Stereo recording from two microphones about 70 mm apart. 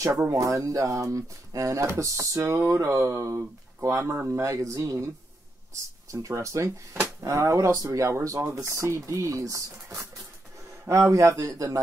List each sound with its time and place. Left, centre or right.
0.3 s speech: right
6.1 s speech: right